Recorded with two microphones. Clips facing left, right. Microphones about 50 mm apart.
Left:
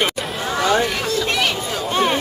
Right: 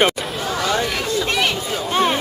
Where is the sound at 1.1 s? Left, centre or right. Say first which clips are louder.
Right 1 dB; centre.